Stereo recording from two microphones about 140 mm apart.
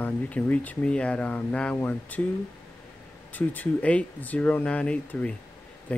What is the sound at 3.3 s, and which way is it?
Speech, 10° left (ahead or behind).